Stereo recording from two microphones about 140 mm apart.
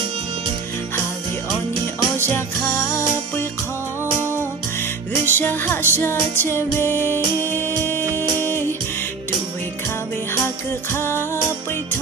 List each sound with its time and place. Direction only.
2.3 s music: 15° left (ahead or behind)
4.2 s music: 15° right (ahead or behind)
5.2 s music: 15° left (ahead or behind)
10.3 s music: 15° left (ahead or behind)